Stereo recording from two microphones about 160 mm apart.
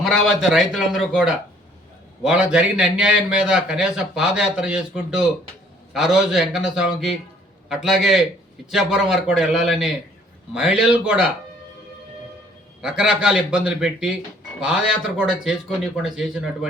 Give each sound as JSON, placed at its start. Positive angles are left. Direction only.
{"t": 0.0, "sound": "a man's voice", "side_deg": 0}
{"t": 12.8, "sound": "a man's voice", "side_deg": -5}